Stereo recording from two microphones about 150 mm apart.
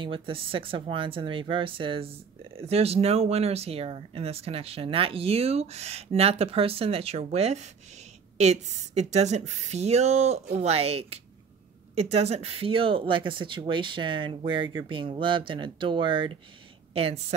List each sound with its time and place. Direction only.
0.0 s a woman's voice: 35° right (ahead or behind)